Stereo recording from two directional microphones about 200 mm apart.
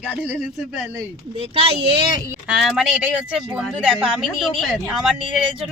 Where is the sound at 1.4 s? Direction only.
30° right (ahead or behind).